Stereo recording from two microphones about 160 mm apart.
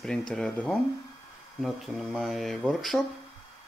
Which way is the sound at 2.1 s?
Centre (ahead or behind).